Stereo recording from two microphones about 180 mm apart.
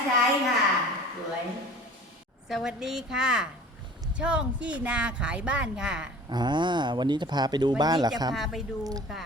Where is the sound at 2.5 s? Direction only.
Centre (ahead or behind).